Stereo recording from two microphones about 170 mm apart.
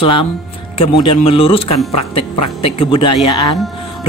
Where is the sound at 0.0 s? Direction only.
30° left (ahead or behind).